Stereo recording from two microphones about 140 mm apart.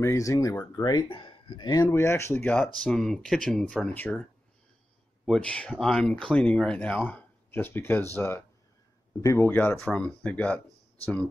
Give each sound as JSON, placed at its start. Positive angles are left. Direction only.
{"t": 0.0, "sound": "speech", "side_deg": 20}
{"t": 1.0, "sound": "speech", "side_deg": 35}